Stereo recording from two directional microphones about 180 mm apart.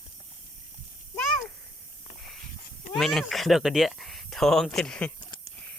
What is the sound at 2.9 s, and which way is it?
Speech, centre (ahead or behind).